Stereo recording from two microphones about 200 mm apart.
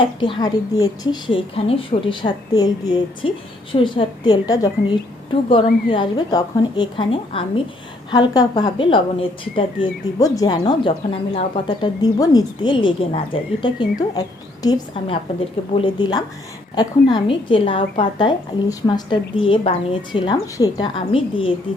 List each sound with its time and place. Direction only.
0.0 s a woman's voice: 25° left (ahead or behind)